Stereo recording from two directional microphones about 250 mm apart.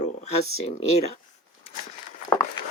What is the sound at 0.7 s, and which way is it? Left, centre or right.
Speech, left.